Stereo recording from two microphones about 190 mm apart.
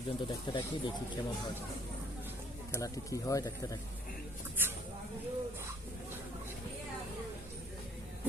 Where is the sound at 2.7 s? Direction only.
15° left (ahead or behind).